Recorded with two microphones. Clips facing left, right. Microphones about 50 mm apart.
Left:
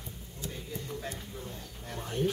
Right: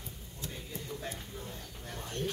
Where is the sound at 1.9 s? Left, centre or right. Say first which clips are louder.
Left 6 dB; centre.